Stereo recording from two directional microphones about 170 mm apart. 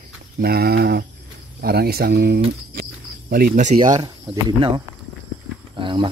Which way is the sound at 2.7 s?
60° right (ahead or behind).